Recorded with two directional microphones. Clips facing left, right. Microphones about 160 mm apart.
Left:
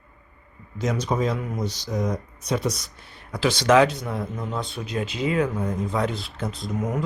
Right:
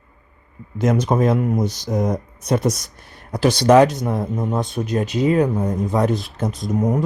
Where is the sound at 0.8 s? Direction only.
55° right (ahead or behind).